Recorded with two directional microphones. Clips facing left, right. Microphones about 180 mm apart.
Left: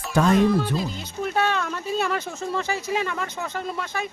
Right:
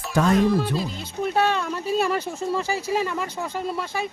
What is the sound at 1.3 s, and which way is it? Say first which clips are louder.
Speech: right 1 dB; centre (ahead or behind).